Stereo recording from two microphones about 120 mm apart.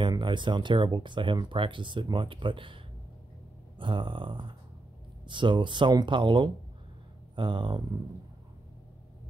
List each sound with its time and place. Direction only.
0.0 s speech: 40° right (ahead or behind)